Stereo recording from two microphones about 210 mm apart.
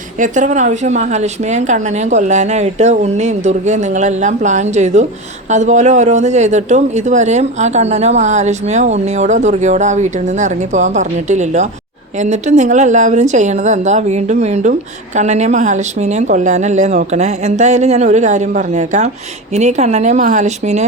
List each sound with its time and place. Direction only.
0.2 s a woman's voice: 35° right (ahead or behind)